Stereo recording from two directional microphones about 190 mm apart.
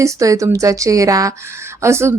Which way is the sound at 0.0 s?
15° right (ahead or behind).